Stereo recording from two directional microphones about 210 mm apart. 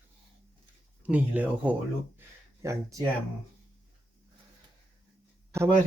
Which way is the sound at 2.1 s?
15° right (ahead or behind).